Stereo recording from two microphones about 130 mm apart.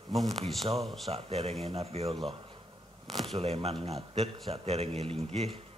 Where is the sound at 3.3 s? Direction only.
50° right (ahead or behind).